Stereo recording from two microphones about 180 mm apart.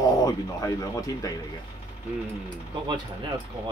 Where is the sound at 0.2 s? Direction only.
20° left (ahead or behind).